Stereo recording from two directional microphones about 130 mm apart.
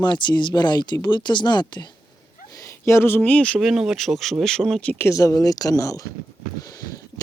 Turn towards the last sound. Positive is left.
turn(degrees=25)  # may be behind; listen again after turning